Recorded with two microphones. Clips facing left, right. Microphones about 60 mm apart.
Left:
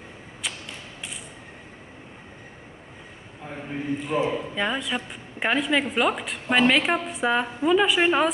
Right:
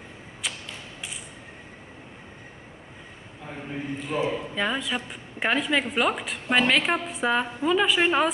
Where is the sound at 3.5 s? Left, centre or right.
Centre.